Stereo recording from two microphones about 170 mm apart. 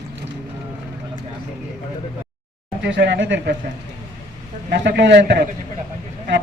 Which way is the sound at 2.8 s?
90° right.